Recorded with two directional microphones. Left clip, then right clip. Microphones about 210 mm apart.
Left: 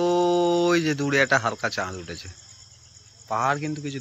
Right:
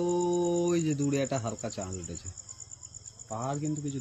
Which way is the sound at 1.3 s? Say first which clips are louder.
Left 12 dB; 30° left (ahead or behind).